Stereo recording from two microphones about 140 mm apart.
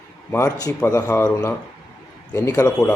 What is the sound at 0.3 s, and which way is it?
Speech, 20° left (ahead or behind).